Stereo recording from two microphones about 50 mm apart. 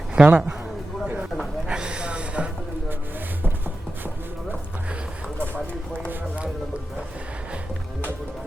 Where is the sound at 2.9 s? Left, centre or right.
Right.